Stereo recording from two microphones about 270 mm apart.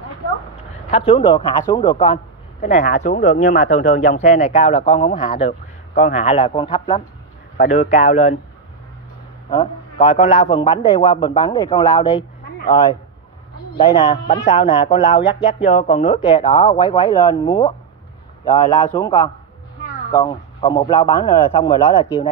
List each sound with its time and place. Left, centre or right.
0.8 s speech: left
9.5 s speech: centre